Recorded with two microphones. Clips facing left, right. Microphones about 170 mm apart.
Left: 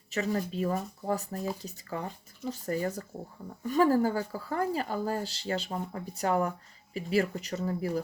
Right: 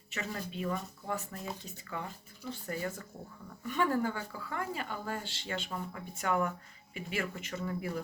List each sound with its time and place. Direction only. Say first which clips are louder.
0.1 s speech: left 9 dB; 40° left (ahead or behind)